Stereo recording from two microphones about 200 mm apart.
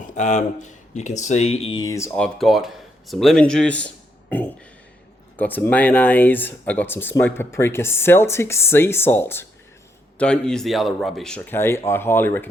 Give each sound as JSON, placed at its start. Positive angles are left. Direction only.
{"t": 0.1, "sound": "speech", "side_deg": 35}